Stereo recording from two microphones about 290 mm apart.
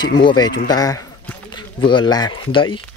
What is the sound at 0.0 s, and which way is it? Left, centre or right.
Speech, centre.